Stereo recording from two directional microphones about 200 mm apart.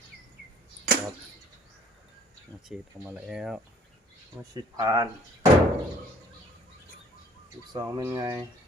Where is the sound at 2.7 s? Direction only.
5° right (ahead or behind).